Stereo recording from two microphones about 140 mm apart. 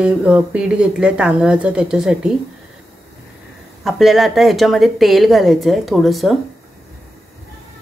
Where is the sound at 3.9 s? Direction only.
Centre (ahead or behind).